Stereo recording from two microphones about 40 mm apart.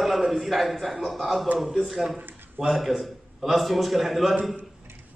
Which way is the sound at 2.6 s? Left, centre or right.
Centre.